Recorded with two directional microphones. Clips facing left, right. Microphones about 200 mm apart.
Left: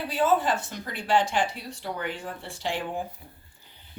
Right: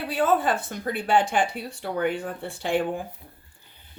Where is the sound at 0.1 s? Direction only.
55° right (ahead or behind).